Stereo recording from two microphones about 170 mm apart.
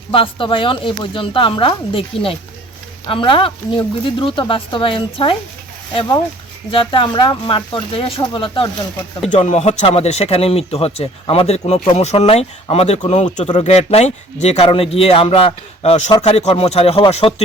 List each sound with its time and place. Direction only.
0.1 s speech: 30° left (ahead or behind)
9.3 s speech: 45° left (ahead or behind)